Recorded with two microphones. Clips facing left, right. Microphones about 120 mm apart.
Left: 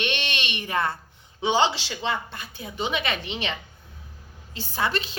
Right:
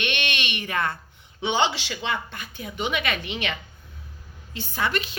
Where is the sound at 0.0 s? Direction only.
35° left (ahead or behind).